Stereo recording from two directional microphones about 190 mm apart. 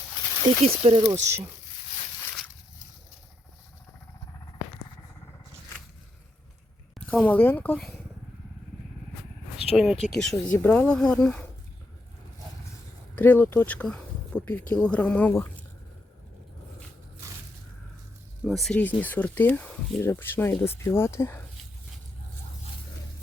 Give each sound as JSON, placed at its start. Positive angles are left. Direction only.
{"t": 0.4, "sound": "speech", "side_deg": -30}
{"t": 1.2, "sound": "speech", "side_deg": -15}
{"t": 7.1, "sound": "speech", "side_deg": 10}
{"t": 9.7, "sound": "speech", "side_deg": 0}
{"t": 13.1, "sound": "speech", "side_deg": 10}
{"t": 18.4, "sound": "speech", "side_deg": 0}